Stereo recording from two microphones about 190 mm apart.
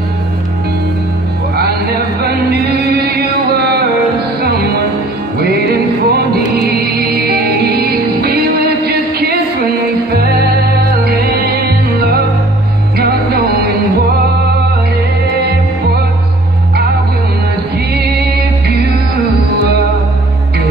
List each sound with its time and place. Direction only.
1.6 s music: 60° right (ahead or behind)
10.1 s music: 55° right (ahead or behind)
12.9 s music: 55° right (ahead or behind)